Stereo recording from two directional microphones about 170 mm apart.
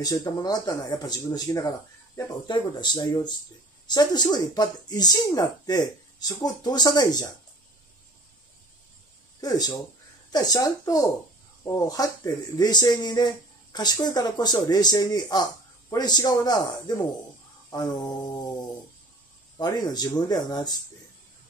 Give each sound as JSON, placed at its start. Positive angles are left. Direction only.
{"t": 0.0, "sound": "speech", "side_deg": 20}
{"t": 9.4, "sound": "speech", "side_deg": 25}